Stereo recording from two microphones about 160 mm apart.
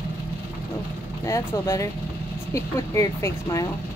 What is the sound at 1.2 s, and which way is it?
Speech, 20° left (ahead or behind).